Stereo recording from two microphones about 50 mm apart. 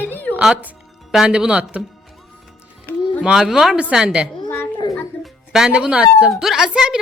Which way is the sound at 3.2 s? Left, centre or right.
Centre.